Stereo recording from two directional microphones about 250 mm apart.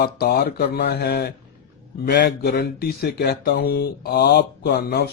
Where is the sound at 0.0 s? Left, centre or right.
Left.